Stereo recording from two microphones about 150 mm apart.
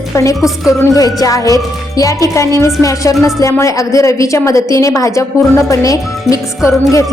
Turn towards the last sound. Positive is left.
turn(degrees=20)  # may be behind; listen again after turning